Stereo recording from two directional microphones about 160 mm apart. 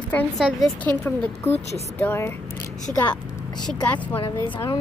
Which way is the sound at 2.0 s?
15° left (ahead or behind).